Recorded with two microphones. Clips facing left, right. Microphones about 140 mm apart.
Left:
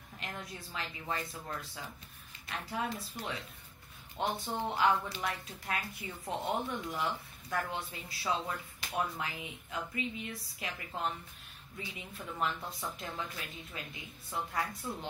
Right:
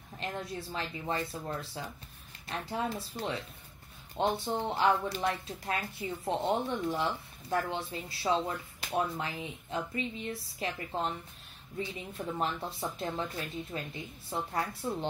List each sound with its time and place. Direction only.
0.2 s speech: 30° right (ahead or behind)